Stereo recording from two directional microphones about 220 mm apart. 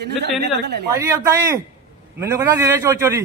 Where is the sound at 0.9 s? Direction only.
15° right (ahead or behind).